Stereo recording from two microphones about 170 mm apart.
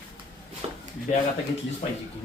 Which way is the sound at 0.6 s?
35° right (ahead or behind).